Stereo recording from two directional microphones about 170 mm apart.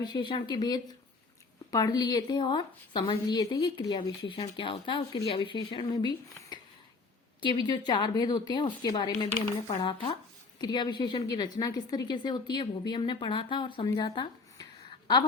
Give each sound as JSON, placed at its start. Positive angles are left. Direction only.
{"t": 0.0, "sound": "a woman's voice", "side_deg": 25}